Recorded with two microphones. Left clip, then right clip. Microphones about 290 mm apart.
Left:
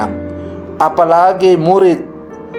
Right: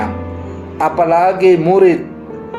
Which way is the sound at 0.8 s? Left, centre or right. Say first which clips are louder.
Left 3 dB; left.